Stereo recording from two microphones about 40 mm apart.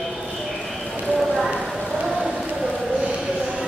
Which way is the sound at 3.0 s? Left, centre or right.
Right.